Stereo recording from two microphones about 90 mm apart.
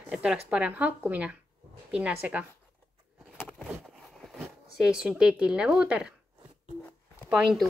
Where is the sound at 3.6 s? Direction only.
5° right (ahead or behind).